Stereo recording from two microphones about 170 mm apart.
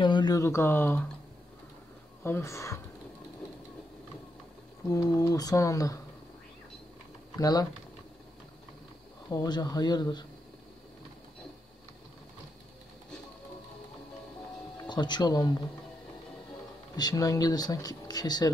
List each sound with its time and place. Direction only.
0.0 s speech: 25° left (ahead or behind)
2.2 s speech: 15° left (ahead or behind)
4.8 s speech: 20° left (ahead or behind)
7.3 s speech: 20° left (ahead or behind)
9.3 s speech: 20° left (ahead or behind)
14.8 s speech: 25° left (ahead or behind)
16.9 s speech: 20° left (ahead or behind)